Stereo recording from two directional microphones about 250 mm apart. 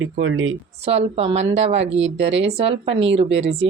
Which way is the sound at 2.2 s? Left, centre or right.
Right.